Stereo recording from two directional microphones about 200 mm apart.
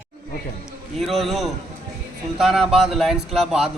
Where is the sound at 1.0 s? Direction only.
Centre (ahead or behind).